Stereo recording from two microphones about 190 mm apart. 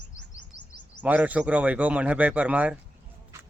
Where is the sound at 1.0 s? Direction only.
10° right (ahead or behind).